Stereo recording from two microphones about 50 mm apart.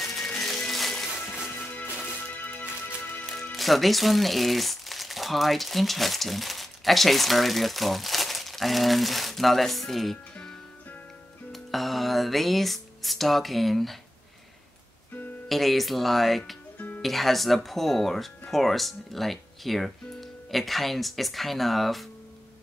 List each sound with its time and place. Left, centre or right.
0.0 s music: centre
1.6 s music: left
3.5 s speech: centre
11.5 s speech: centre
15.4 s speech: centre
16.7 s music: left
17.0 s speech: centre